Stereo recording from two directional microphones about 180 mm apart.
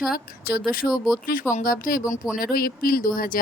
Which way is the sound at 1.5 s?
50° left (ahead or behind).